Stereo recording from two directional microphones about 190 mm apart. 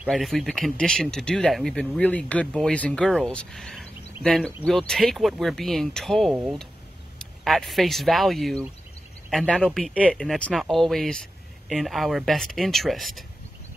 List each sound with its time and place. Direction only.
0.0 s speech: centre (ahead or behind)